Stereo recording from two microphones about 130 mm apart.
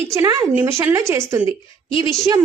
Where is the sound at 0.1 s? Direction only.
25° right (ahead or behind).